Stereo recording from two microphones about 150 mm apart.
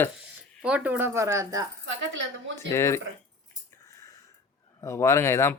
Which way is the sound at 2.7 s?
20° left (ahead or behind).